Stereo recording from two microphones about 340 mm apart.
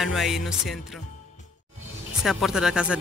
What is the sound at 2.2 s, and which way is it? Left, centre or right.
Speech, centre.